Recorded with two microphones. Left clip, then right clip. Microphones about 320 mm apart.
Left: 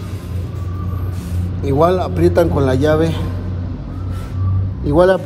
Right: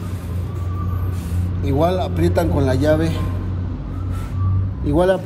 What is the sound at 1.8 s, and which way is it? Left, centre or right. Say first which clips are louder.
Speech: left 5 dB; left.